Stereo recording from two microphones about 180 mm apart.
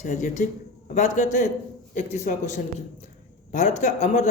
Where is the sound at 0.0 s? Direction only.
40° left (ahead or behind).